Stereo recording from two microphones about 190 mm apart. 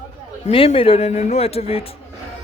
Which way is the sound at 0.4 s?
30° left (ahead or behind).